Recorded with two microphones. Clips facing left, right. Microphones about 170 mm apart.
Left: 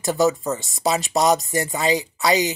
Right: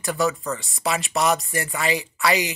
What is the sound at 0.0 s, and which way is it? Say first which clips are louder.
Speech: left 4 dB; 20° left (ahead or behind).